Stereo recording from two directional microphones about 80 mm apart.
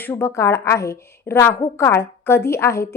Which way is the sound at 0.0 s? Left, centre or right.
Left.